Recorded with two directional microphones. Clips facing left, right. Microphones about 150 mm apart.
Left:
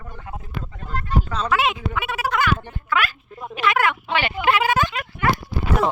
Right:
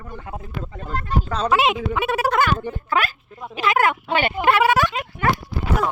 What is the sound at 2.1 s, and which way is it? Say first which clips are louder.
Speech: right 2 dB; 45° right (ahead or behind).